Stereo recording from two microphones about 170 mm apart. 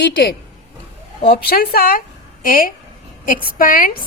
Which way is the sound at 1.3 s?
65° left (ahead or behind).